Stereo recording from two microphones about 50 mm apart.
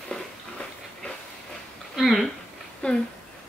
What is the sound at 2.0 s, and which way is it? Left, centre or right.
Speech, centre.